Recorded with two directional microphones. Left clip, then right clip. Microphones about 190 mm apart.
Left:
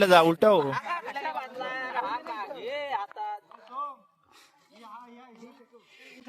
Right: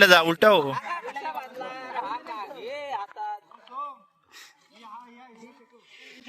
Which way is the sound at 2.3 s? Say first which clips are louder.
Left 1 dB; centre (ahead or behind).